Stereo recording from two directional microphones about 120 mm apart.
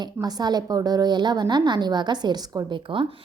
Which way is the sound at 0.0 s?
35° right (ahead or behind).